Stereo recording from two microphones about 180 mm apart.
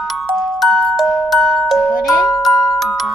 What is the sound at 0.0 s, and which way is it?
Music, centre (ahead or behind).